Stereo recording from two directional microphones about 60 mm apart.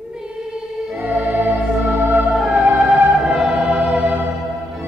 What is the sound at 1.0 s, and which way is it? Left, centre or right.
Organ, right.